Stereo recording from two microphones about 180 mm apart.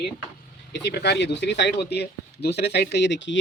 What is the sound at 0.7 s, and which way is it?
Speech, 70° left (ahead or behind).